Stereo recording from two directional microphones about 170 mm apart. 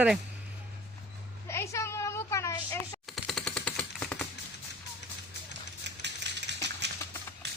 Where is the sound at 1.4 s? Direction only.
15° left (ahead or behind).